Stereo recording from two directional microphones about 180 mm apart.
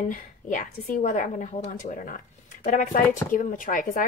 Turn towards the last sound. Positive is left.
turn(degrees=50)  # may be behind; listen again after turning